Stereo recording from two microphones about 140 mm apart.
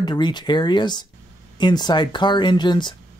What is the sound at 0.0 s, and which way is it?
Speech, 30° left (ahead or behind).